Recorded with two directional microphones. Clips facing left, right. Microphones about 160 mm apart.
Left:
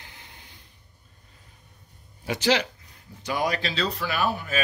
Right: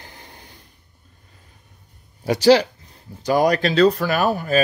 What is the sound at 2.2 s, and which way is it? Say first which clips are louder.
Speech: right 10 dB; 35° right (ahead or behind).